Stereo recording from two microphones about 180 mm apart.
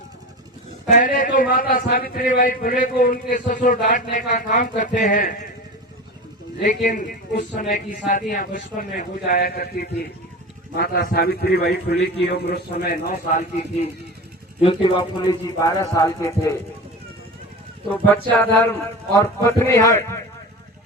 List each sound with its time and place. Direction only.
0.9 s a man's voice: 45° left (ahead or behind)
6.6 s a man's voice: 45° left (ahead or behind)
14.6 s a man's voice: 30° left (ahead or behind)
17.9 s a man's voice: 10° left (ahead or behind)